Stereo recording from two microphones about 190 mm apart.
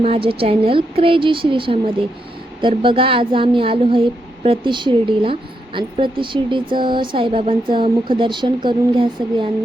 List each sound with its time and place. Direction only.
0.0 s speech: 30° right (ahead or behind)